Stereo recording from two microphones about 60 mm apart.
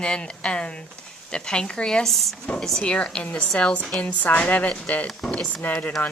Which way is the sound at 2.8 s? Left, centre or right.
Centre.